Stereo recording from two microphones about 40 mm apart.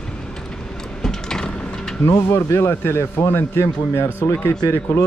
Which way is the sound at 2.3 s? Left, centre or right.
Left.